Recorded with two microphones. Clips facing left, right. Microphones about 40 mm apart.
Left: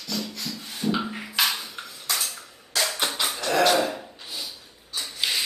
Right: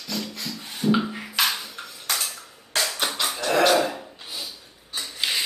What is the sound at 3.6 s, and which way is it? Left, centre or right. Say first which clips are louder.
Rub: right 1 dB; centre.